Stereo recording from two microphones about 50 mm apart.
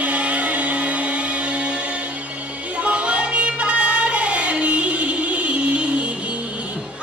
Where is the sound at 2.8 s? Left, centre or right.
Right.